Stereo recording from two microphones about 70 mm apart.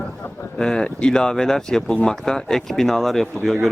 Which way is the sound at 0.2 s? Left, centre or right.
Left.